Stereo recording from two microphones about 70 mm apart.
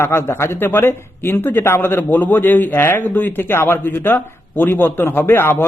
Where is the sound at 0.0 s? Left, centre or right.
Left.